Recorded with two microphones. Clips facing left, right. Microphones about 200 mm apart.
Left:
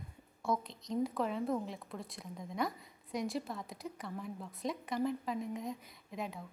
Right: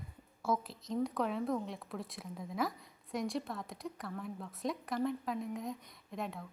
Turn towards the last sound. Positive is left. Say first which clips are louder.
# right 1 dB
turn(degrees=0)  # may be behind; listen again after turning